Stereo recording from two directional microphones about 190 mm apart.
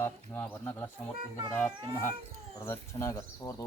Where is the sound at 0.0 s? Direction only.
10° left (ahead or behind).